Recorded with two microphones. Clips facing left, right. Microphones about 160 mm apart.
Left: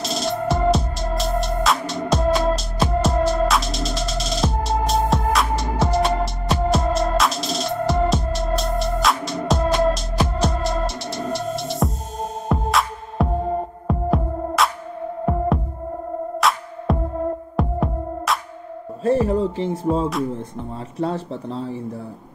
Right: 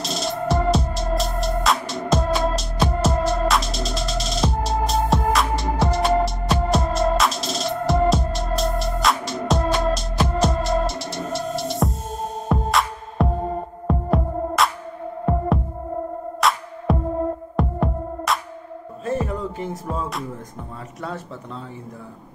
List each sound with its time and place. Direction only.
0.0 s music: centre (ahead or behind)
19.0 s music: 30° left (ahead or behind)
21.0 s speech: 30° left (ahead or behind)